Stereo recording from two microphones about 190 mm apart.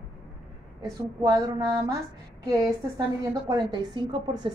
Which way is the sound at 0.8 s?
20° right (ahead or behind).